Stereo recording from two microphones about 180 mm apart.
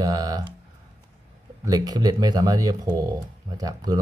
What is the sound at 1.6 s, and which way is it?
Speech, 20° right (ahead or behind).